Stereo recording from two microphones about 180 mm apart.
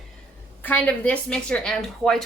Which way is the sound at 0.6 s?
10° left (ahead or behind).